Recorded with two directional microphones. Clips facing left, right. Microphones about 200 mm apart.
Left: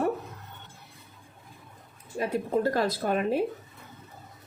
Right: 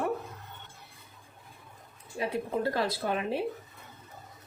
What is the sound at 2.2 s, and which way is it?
A woman's voice, 45° left (ahead or behind).